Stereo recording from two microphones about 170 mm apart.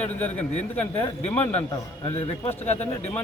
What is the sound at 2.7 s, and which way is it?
Speech, 10° left (ahead or behind).